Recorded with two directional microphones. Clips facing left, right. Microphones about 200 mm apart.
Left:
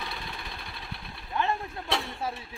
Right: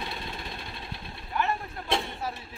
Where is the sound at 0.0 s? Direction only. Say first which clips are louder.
Right 2 dB; 25° right (ahead or behind).